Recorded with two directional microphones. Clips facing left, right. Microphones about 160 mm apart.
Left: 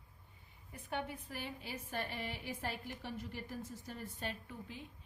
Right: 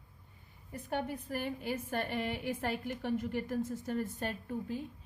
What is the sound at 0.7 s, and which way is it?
A woman's voice, 40° right (ahead or behind).